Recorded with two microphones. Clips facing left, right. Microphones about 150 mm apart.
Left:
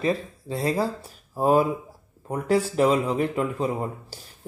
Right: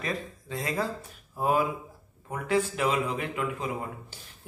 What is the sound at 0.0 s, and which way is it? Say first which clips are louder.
Speech: left 8 dB; 30° left (ahead or behind).